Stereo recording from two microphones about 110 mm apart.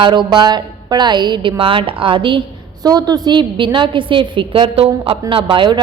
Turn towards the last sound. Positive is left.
turn(degrees=-50)  # may be behind; listen again after turning